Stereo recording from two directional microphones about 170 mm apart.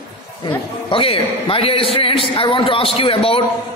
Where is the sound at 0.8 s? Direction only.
35° left (ahead or behind).